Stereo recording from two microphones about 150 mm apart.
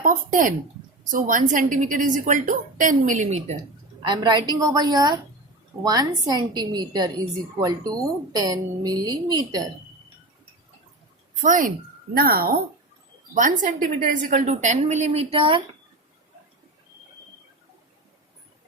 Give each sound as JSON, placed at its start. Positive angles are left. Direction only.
{"t": 0.0, "sound": "a woman's voice", "side_deg": -60}
{"t": 4.0, "sound": "a woman's voice", "side_deg": -30}
{"t": 11.4, "sound": "a woman's voice", "side_deg": -60}
{"t": 12.1, "sound": "speech", "side_deg": -90}
{"t": 13.3, "sound": "a woman's voice", "side_deg": -55}